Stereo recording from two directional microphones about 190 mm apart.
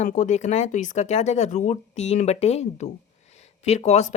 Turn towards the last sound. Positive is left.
turn(degrees=35)  # may be behind; listen again after turning